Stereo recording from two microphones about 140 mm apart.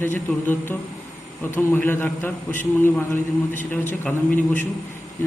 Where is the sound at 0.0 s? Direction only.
15° left (ahead or behind).